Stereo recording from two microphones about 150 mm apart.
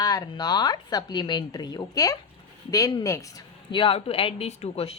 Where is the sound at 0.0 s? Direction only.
25° left (ahead or behind).